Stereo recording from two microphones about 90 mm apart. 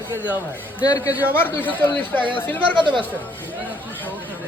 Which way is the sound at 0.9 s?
40° left (ahead or behind).